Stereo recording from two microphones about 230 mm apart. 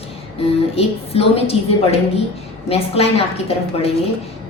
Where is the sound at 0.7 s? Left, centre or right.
Left.